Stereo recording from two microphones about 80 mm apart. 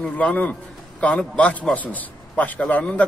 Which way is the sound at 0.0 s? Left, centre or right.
Centre.